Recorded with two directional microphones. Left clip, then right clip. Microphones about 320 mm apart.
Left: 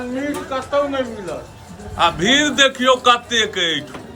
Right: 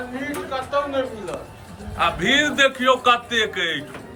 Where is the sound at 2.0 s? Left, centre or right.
Centre.